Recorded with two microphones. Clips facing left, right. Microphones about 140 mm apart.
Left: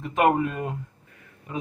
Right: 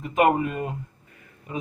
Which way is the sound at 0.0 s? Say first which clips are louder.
Right 1 dB; 5° right (ahead or behind).